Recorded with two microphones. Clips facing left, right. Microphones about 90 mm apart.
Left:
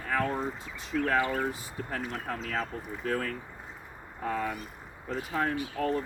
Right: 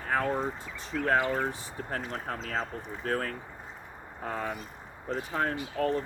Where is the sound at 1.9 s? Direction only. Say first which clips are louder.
Even; 40° right (ahead or behind).